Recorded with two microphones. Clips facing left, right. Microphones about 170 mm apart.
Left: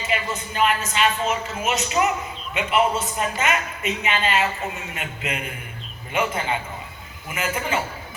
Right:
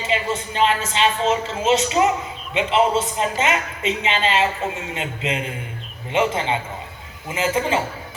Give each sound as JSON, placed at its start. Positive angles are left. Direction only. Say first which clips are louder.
{"t": 0.1, "sound": "speech", "louder": "right 4 dB", "side_deg": -25}